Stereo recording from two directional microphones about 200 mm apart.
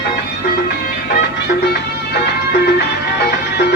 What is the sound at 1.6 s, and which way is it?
Music, 55° left (ahead or behind).